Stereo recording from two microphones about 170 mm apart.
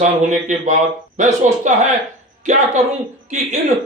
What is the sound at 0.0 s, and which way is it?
A man's voice, 45° right (ahead or behind).